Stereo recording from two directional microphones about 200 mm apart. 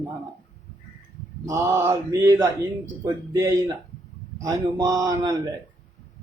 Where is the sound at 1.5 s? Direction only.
15° right (ahead or behind).